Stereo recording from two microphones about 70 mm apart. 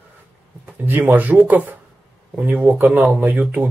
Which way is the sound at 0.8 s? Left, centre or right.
Right.